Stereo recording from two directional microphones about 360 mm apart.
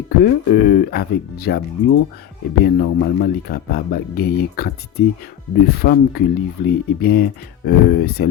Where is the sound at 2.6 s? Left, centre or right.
Left.